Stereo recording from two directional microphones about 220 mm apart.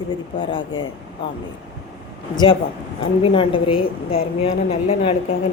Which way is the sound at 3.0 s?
25° left (ahead or behind).